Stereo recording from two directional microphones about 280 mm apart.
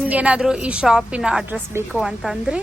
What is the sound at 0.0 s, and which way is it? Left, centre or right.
A woman's voice, centre.